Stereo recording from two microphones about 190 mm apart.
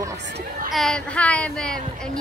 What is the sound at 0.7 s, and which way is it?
Speech, centre (ahead or behind).